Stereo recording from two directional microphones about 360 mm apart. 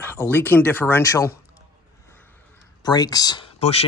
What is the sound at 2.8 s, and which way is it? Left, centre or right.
Speech, centre.